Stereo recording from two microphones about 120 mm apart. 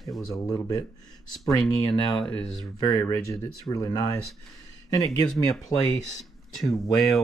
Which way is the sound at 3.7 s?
30° left (ahead or behind).